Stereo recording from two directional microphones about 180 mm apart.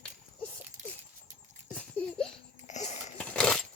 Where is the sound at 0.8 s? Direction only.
45° right (ahead or behind).